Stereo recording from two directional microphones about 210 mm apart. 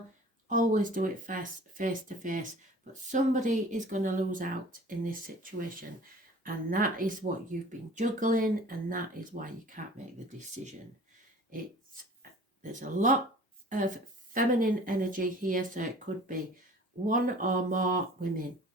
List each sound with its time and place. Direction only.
0.4 s speech: 40° right (ahead or behind)
12.6 s speech: 40° right (ahead or behind)